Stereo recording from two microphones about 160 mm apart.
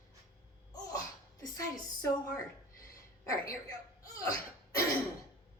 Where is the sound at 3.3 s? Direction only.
20° left (ahead or behind).